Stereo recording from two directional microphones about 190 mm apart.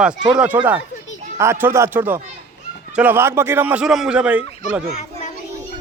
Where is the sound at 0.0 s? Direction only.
5° right (ahead or behind).